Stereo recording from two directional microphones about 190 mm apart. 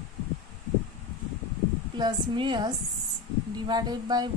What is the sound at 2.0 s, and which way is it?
Speech, 25° right (ahead or behind).